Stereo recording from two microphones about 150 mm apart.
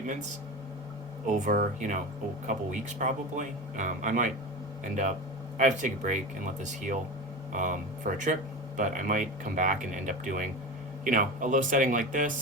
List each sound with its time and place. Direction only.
1.3 s speech: 60° right (ahead or behind)